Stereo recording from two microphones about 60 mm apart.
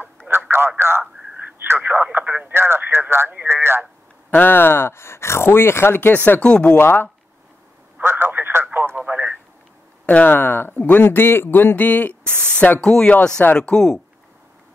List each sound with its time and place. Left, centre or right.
0.3 s a sound: right
0.7 s speech: right
1.8 s a sound: right
2.4 s radio: right
3.4 s speech: right
4.3 s speech: left
6.4 s speech: left
6.8 s speech: left
8.0 s telephone: right
10.0 s speech: left
12.3 s speech: centre
13.4 s speech: left
13.7 s speech: centre